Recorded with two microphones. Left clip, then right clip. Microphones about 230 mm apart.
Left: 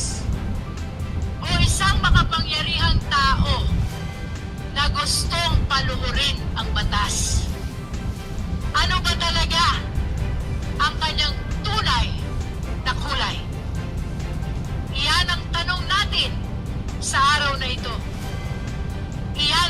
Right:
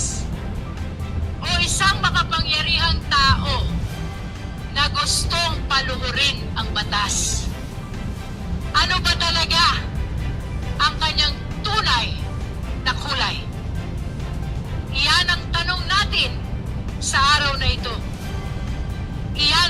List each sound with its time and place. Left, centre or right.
1.5 s vehicle: centre
4.7 s vehicle: centre
8.7 s music: centre
14.9 s vehicle: centre
19.4 s music: centre